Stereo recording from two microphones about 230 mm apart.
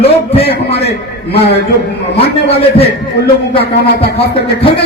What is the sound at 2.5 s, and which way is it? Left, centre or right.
Speech, left.